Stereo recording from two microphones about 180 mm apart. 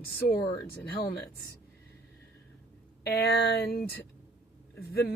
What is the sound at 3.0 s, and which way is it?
Speech, 65° left (ahead or behind).